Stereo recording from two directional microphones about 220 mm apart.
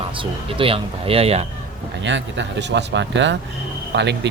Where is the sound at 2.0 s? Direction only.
55° right (ahead or behind).